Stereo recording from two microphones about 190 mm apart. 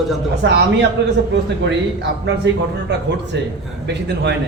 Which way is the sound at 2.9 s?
65° right (ahead or behind).